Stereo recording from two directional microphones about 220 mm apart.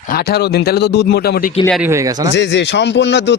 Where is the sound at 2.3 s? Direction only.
55° left (ahead or behind).